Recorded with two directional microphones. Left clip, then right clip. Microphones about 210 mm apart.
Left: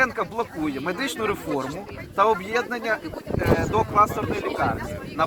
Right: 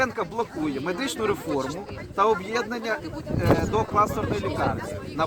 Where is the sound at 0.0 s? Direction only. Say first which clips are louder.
Left 2 dB; 20° right (ahead or behind).